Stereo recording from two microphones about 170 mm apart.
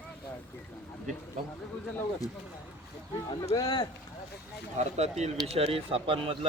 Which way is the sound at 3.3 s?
20° left (ahead or behind).